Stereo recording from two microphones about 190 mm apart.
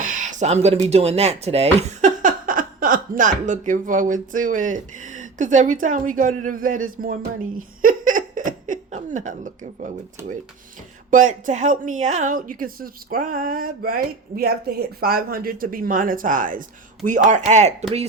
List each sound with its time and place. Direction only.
0.0 s speech: 40° right (ahead or behind)
7.8 s giggle: 45° right (ahead or behind)
11.1 s a woman's voice: 40° right (ahead or behind)